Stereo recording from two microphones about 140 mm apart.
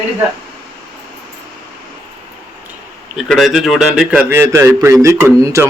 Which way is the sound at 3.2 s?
Centre (ahead or behind).